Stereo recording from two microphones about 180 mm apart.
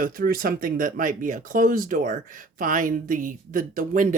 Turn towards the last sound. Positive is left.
turn(degrees=-45)  # may be behind; listen again after turning